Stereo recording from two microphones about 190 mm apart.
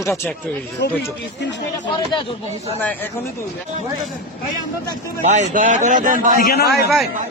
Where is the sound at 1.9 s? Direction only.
25° left (ahead or behind).